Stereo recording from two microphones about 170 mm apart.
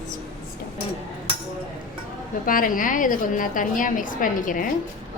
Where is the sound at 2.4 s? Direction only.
55° left (ahead or behind).